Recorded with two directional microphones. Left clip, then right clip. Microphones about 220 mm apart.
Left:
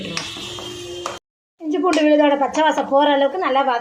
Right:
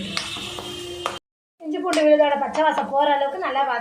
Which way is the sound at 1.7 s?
40° left (ahead or behind).